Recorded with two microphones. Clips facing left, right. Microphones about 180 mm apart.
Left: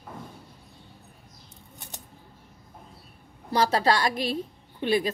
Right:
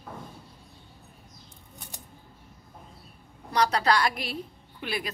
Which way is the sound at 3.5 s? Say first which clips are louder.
Left 1 dB; 25° left (ahead or behind).